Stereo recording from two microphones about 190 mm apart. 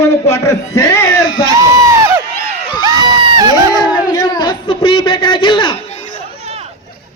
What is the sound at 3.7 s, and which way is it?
A man's voice, 20° left (ahead or behind).